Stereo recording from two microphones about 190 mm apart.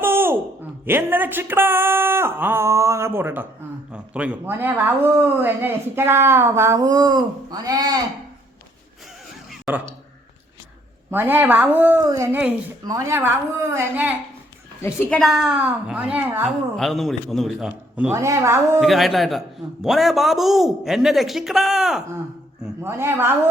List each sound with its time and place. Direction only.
0.0 s a sound: 10° right (ahead or behind)
0.9 s speech: 10° right (ahead or behind)
9.5 s chuckle: 10° right (ahead or behind)
11.1 s speech: 10° right (ahead or behind)
14.8 s a woman's voice: 15° left (ahead or behind)
15.2 s speech: centre (ahead or behind)
16.7 s a man's voice: centre (ahead or behind)
18.1 s speech: 15° right (ahead or behind)
18.8 s a man's voice: centre (ahead or behind)
22.6 s a man's voice: 10° right (ahead or behind)